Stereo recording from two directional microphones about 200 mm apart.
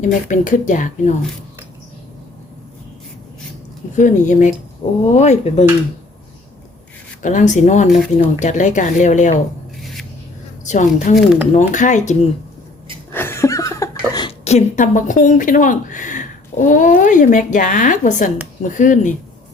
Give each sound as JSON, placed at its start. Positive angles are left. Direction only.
{"t": 0.0, "sound": "speech", "side_deg": 40}
{"t": 3.9, "sound": "speech", "side_deg": 40}
{"t": 7.2, "sound": "speech", "side_deg": 40}
{"t": 9.8, "sound": "a sound", "side_deg": 0}
{"t": 10.7, "sound": "speech", "side_deg": 35}
{"t": 13.1, "sound": "a sound", "side_deg": 10}
{"t": 14.4, "sound": "speech", "side_deg": 35}